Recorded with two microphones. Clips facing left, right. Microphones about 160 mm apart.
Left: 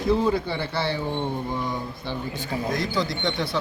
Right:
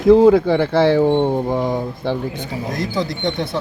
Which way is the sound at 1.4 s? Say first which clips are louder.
Right 9 dB; 85° right.